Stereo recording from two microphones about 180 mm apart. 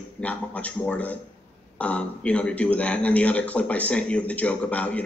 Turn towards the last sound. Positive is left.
turn(degrees=5)  # may be behind; listen again after turning